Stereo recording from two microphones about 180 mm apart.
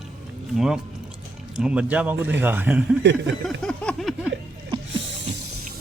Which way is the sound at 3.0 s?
75° right (ahead or behind).